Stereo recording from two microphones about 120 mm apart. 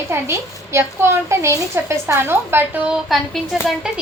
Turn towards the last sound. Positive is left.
turn(degrees=-5)  # may be behind; listen again after turning